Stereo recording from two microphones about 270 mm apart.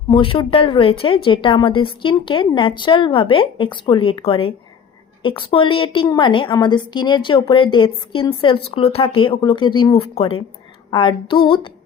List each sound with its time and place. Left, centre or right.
0.1 s a woman's voice: centre